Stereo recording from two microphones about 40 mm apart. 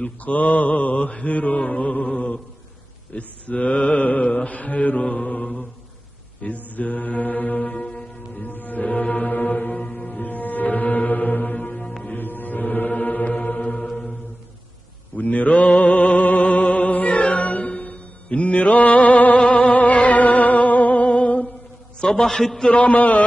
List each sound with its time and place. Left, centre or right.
0.0 s mantra: left
7.7 s music: centre
8.4 s music: left
9.3 s music: left
15.1 s music: left
22.1 s a man's voice: centre
22.7 s mantra: left